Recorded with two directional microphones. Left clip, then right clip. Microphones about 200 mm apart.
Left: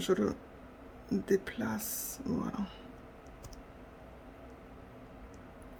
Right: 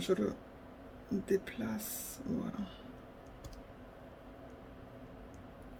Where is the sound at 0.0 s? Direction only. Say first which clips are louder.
Left 3 dB; 25° left (ahead or behind).